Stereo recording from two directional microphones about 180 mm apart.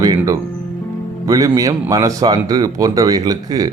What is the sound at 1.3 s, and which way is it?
Speech, 20° right (ahead or behind).